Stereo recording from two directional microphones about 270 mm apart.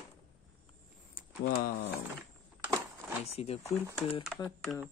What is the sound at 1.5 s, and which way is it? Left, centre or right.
Speech, left.